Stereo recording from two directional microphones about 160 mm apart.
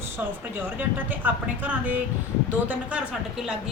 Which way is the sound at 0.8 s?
10° right (ahead or behind).